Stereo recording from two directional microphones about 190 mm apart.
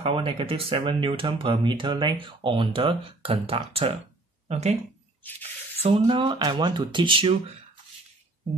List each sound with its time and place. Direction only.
0.0 s speech: 30° right (ahead or behind)